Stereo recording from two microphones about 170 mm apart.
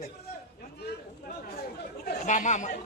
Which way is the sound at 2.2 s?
45° left (ahead or behind).